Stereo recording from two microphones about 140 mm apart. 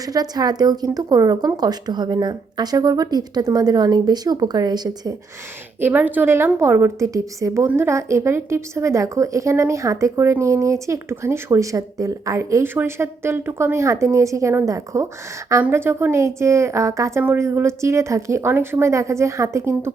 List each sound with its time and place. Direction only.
0.0 s a woman's voice: 25° right (ahead or behind)
5.8 s a woman's voice: 10° right (ahead or behind)